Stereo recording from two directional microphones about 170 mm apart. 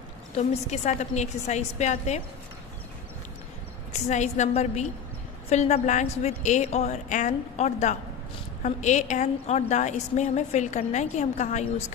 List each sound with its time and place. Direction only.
0.4 s a woman's voice: 40° left (ahead or behind)
4.1 s a woman's voice: 45° left (ahead or behind)